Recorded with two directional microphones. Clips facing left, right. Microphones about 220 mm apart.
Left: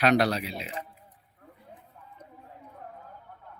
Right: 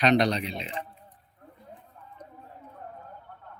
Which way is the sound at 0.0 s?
5° left (ahead or behind).